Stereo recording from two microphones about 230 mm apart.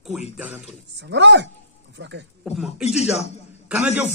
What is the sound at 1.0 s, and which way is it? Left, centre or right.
Speech, right.